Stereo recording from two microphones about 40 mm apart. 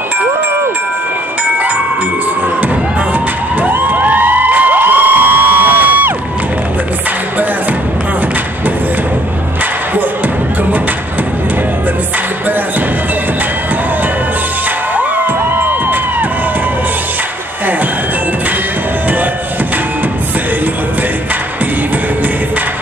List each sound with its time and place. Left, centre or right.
3.6 s cheering: right
15.0 s music: right